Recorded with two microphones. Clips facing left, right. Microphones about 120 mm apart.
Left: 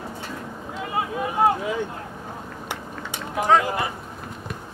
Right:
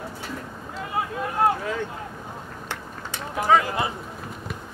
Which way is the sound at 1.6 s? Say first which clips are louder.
Left 2 dB; 15° left (ahead or behind).